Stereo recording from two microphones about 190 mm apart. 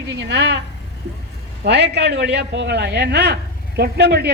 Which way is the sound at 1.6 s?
60° right (ahead or behind).